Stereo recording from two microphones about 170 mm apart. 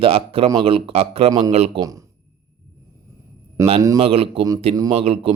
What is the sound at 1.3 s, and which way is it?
Speech, 20° right (ahead or behind).